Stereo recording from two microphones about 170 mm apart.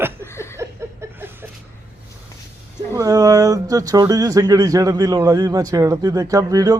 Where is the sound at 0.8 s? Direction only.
15° right (ahead or behind).